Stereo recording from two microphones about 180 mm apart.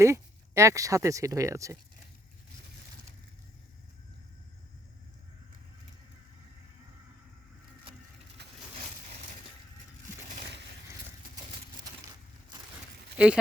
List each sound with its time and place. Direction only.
0.0 s speech: 15° right (ahead or behind)
8.4 s a sound: 65° right (ahead or behind)
13.1 s speech: 5° right (ahead or behind)